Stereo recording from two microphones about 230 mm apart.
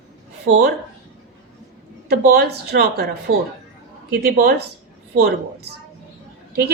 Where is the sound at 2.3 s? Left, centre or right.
Right.